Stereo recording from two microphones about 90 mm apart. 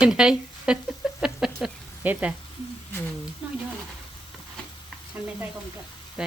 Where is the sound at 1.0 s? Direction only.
10° right (ahead or behind).